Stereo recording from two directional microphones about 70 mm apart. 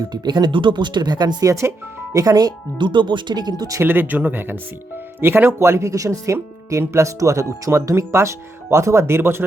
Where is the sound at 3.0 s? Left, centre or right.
Right.